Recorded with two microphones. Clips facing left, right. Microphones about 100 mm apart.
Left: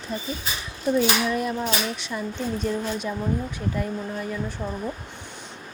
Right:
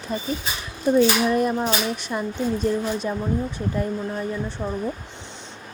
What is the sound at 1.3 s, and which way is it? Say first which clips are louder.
Speech: right 4 dB; 45° right (ahead or behind).